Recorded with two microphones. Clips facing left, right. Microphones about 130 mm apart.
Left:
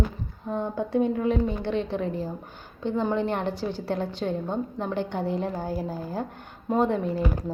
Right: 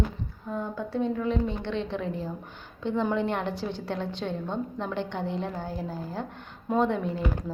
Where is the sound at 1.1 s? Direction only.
50° left (ahead or behind).